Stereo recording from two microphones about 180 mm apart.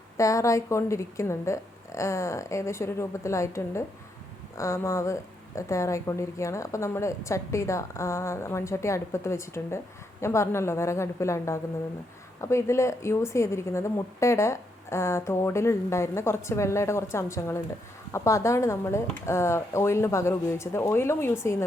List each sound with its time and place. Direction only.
0.2 s speech: 15° left (ahead or behind)